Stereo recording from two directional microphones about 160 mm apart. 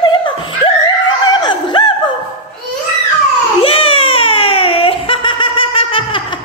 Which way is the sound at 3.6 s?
35° left (ahead or behind).